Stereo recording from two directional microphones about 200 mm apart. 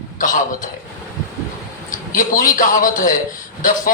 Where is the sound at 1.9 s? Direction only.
45° left (ahead or behind).